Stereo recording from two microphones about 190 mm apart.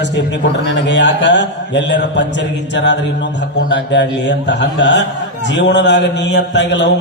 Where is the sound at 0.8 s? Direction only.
70° left (ahead or behind).